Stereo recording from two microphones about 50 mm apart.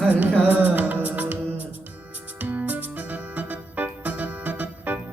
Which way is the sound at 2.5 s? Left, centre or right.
Right.